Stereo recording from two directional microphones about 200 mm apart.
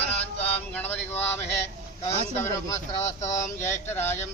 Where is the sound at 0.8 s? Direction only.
10° left (ahead or behind).